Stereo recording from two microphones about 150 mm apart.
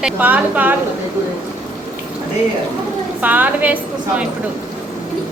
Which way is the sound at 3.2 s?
10° right (ahead or behind).